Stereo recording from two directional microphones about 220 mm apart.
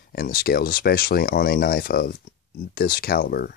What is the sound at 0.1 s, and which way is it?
Speech, 45° left (ahead or behind).